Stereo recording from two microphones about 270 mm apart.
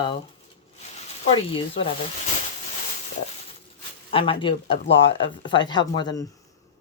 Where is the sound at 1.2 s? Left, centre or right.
Left.